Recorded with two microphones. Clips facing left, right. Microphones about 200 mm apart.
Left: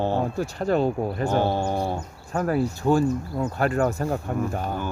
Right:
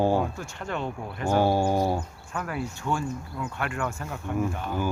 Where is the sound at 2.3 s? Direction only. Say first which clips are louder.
Left 9 dB; 40° left (ahead or behind).